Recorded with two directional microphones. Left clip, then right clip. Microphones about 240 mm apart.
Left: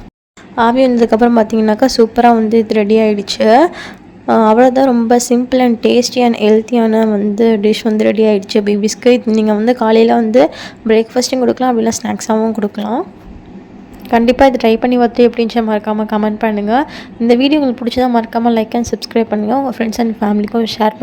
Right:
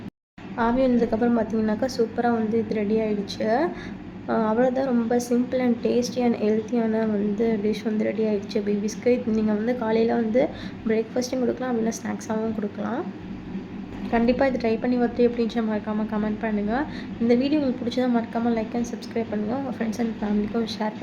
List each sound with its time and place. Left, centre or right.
0.5 s a woman's voice: left
14.1 s a woman's voice: left